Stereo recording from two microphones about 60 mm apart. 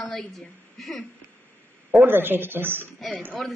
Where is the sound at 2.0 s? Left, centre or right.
Right.